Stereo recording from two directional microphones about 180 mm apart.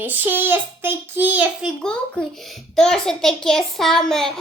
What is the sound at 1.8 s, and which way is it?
A child's voice, 5° left (ahead or behind).